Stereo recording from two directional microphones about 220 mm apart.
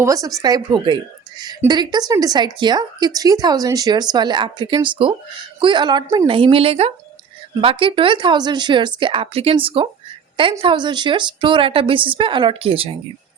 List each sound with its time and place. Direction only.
0.0 s speech: 15° right (ahead or behind)